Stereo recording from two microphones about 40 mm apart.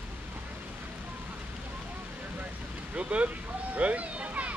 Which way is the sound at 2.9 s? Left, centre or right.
Right.